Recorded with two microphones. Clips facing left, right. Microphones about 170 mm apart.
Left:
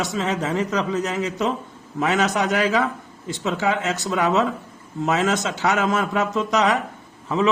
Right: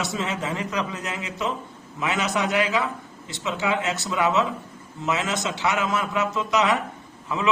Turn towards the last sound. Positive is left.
turn(degrees=35)  # may be behind; listen again after turning